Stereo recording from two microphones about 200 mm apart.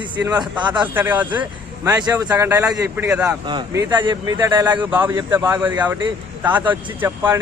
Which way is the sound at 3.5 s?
20° right (ahead or behind).